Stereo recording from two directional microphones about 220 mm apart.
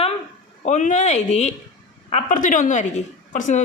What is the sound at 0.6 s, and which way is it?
Speech, 35° left (ahead or behind).